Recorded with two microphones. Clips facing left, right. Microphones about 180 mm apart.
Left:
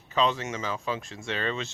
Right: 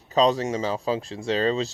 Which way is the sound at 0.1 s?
35° right (ahead or behind).